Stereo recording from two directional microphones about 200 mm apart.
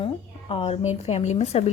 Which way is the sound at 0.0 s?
25° left (ahead or behind).